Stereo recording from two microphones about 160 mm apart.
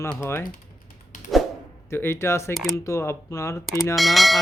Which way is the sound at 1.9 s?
15° left (ahead or behind).